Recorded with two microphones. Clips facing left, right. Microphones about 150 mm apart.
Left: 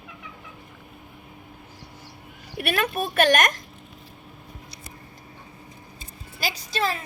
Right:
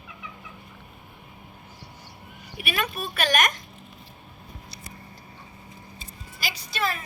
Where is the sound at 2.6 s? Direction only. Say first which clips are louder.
Left 5 dB; 55° left (ahead or behind).